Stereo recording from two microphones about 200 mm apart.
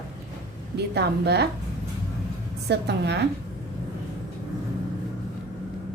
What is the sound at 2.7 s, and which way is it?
Speech, 60° right (ahead or behind).